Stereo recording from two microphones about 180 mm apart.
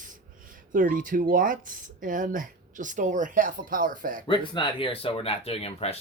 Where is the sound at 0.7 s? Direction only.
50° right (ahead or behind).